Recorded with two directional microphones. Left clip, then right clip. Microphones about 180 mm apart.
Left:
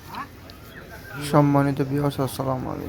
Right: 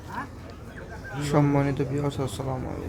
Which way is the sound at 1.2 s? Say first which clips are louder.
Left 4 dB; 20° left (ahead or behind).